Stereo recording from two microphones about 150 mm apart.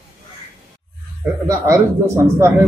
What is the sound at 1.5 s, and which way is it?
Speech, 20° right (ahead or behind).